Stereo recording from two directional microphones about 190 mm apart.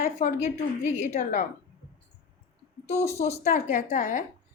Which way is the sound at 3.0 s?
35° left (ahead or behind).